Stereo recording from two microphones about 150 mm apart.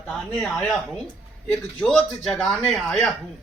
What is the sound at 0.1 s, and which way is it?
Speech, 5° left (ahead or behind).